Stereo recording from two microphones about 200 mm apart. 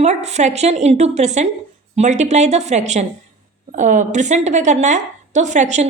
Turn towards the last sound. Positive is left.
turn(degrees=-35)  # may be behind; listen again after turning